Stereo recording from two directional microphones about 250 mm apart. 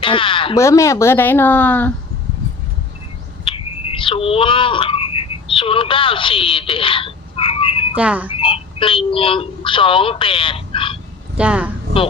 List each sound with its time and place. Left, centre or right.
0.0 s speech: left
3.4 s a sound: left
7.9 s speech: centre
8.3 s speech: left
11.3 s speech: centre